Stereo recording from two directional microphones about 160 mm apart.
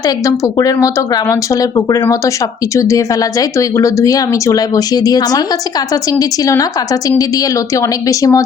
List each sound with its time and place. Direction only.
0.3 s a woman's voice: 20° left (ahead or behind)